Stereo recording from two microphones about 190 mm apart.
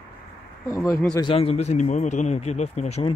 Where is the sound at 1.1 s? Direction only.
25° left (ahead or behind).